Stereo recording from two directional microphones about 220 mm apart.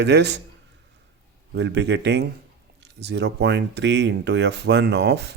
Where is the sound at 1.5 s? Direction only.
50° right (ahead or behind).